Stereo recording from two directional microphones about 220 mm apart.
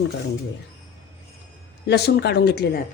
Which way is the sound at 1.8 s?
50° left (ahead or behind).